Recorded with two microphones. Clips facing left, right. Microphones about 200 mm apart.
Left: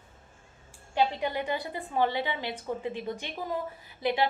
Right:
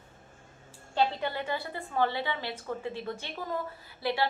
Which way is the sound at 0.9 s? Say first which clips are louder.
Left 1 dB; 15° left (ahead or behind).